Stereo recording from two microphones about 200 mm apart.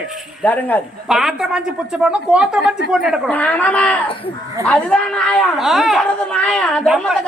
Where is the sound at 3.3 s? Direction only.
10° left (ahead or behind).